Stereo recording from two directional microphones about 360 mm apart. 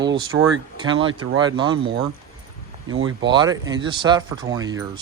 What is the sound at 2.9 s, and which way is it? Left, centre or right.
Speech, right.